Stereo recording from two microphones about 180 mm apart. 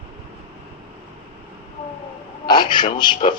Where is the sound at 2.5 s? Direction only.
25° left (ahead or behind).